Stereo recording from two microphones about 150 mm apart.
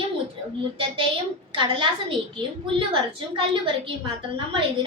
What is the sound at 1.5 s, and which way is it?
A woman's voice, 35° right (ahead or behind).